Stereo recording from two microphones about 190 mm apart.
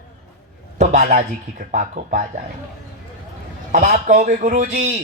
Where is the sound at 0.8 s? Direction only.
40° right (ahead or behind).